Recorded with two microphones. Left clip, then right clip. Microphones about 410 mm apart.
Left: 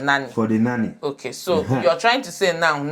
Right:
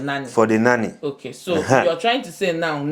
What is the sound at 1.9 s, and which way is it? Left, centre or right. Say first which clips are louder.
Speech: left 2 dB; left.